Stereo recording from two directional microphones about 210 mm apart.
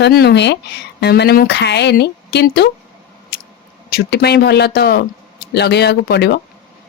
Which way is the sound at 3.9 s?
50° left (ahead or behind).